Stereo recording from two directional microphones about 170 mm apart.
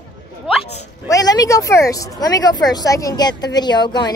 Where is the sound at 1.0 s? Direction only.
20° left (ahead or behind).